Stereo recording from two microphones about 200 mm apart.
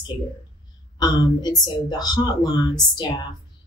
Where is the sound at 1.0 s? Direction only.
20° left (ahead or behind).